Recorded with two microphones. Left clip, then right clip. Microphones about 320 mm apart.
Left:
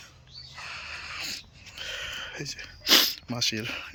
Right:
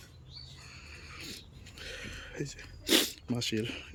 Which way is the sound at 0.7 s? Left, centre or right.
Centre.